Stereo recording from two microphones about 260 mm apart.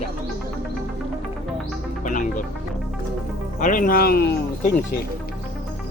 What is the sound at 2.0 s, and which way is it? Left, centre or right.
Music, left.